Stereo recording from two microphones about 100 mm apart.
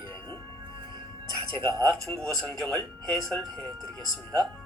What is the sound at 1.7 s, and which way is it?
Speech, 35° right (ahead or behind).